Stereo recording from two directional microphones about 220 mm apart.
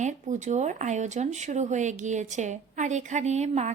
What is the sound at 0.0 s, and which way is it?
Speech, 35° right (ahead or behind).